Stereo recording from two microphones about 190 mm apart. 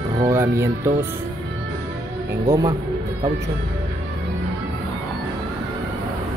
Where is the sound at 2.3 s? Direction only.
15° right (ahead or behind).